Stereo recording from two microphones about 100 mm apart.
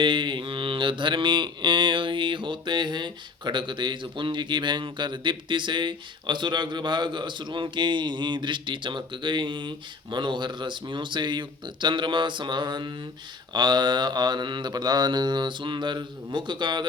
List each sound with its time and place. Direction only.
0.0 s mantra: 55° right (ahead or behind)